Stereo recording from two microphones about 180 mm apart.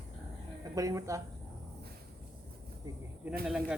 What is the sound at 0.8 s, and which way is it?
Speech, 20° right (ahead or behind).